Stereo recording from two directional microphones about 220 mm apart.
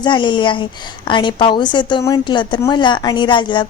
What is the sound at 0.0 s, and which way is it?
A woman's voice, 20° left (ahead or behind).